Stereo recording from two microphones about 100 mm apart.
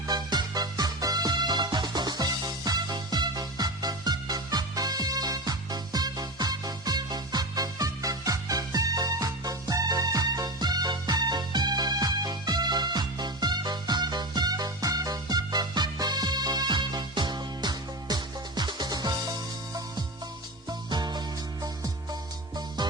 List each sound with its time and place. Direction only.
0.1 s music: 45° right (ahead or behind)
22.8 s music: 45° right (ahead or behind)